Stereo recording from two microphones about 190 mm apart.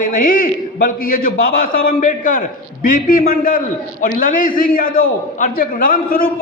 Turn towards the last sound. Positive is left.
turn(degrees=45)  # may be behind; listen again after turning